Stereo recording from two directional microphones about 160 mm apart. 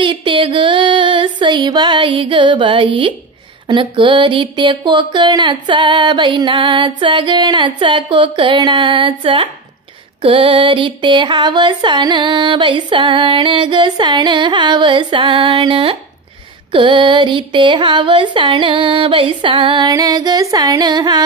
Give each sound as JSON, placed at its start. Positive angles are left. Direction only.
{"t": 0.0, "sound": "music", "side_deg": -30}
{"t": 3.6, "sound": "speech", "side_deg": -30}
{"t": 10.2, "sound": "a sound", "side_deg": -30}
{"t": 16.7, "sound": "speech", "side_deg": -30}